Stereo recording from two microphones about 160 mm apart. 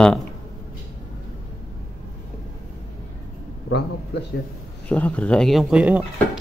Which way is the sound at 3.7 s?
90° left.